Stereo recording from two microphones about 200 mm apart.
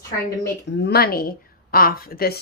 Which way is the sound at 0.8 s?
50° left (ahead or behind).